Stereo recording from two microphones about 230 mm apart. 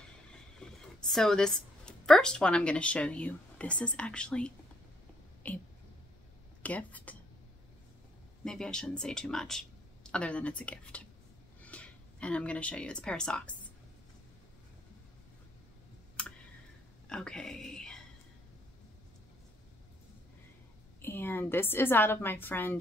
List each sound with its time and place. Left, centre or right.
0.0 s speech: centre
8.5 s speech: centre
17.1 s a sound: centre
21.0 s a woman's voice: centre